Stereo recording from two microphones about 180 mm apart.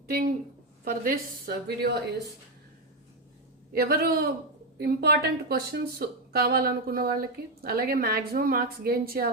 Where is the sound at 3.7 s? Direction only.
55° right (ahead or behind).